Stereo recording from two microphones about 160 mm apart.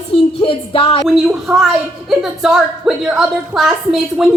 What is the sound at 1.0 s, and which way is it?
A woman's voice, centre (ahead or behind).